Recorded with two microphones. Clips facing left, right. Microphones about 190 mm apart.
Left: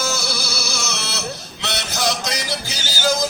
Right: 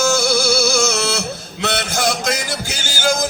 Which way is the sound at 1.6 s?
50° right (ahead or behind).